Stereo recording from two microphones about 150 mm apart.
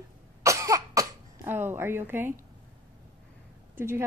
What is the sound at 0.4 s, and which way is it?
Cough, 20° right (ahead or behind).